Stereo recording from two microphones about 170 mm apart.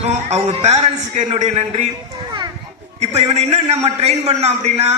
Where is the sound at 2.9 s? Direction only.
40° right (ahead or behind).